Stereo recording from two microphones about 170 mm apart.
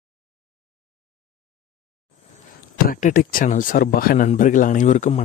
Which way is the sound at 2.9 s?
55° left (ahead or behind).